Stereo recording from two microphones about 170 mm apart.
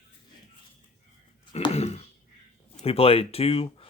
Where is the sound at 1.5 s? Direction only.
35° left (ahead or behind).